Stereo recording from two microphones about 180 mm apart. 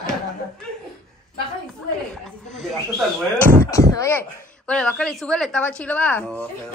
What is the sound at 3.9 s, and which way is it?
A woman's voice, 15° left (ahead or behind).